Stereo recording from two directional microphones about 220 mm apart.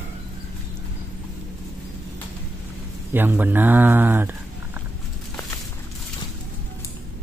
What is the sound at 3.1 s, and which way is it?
A man's voice, 10° right (ahead or behind).